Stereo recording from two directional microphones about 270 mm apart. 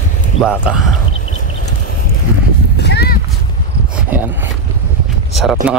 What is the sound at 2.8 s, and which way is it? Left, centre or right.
Clip-clop, left.